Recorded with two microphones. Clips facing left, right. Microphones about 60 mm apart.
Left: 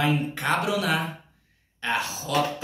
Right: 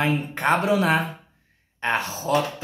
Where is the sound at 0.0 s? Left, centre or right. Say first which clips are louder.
Right 2 dB; right.